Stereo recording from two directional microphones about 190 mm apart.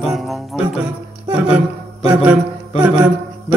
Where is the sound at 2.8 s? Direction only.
5° right (ahead or behind).